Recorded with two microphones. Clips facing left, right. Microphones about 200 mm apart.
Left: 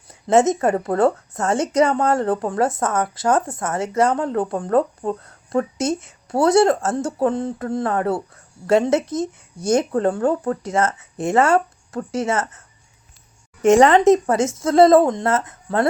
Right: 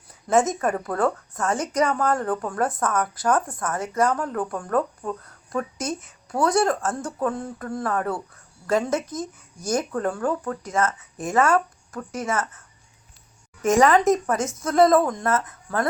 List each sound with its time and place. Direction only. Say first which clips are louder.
0.1 s speech: left 5 dB; 25° left (ahead or behind)
13.6 s speech: left 5 dB; 30° left (ahead or behind)